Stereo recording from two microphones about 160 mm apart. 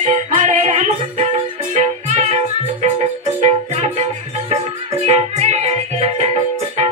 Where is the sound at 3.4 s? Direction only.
45° right (ahead or behind).